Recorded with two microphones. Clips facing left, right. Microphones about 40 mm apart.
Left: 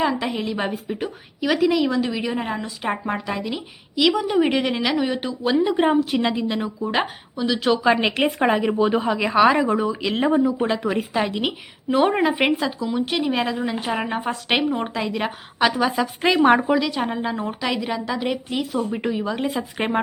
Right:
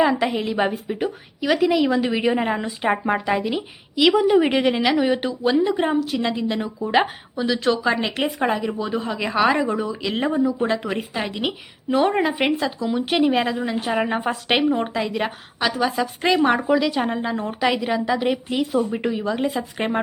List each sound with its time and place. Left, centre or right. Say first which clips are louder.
0.0 s a woman's voice: right 3 dB; centre
5.5 s speech: left 4 dB; centre
6.0 s a woman's voice: left 2 dB; centre
6.2 s a woman's voice: left 1 dB; centre
8.6 s a woman's voice: left 5 dB; left
9.0 s speech: even; centre
13.1 s a woman's voice: right 8 dB; centre
13.3 s speech: right 2 dB; centre
15.5 s a woman's voice: left 2 dB; centre
16.7 s speech: right 2 dB; centre
17.6 s a woman's voice: right 7 dB; centre